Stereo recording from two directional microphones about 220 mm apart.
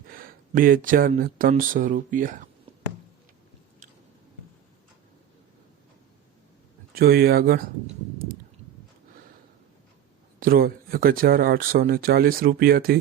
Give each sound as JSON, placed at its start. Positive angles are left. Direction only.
{"t": 0.1, "sound": "speech", "side_deg": -40}
{"t": 6.9, "sound": "speech", "side_deg": -45}
{"t": 10.4, "sound": "speech", "side_deg": -40}